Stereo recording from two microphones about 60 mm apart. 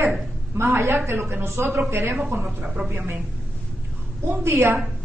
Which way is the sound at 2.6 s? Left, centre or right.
Right.